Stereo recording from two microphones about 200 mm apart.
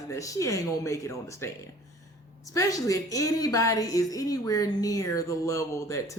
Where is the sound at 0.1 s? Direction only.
15° left (ahead or behind).